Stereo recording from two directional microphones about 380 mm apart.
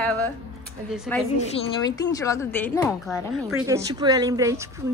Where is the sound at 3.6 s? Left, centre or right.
Centre.